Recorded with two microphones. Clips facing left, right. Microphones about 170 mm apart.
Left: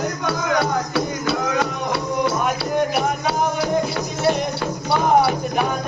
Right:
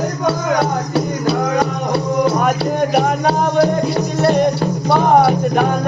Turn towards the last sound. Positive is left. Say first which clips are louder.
# right 5 dB
turn(degrees=-45)  # may be behind; listen again after turning